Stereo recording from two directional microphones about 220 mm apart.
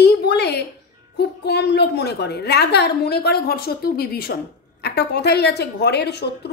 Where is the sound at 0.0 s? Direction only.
50° left (ahead or behind).